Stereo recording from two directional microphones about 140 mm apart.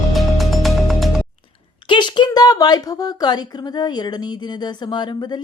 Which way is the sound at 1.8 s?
35° left (ahead or behind).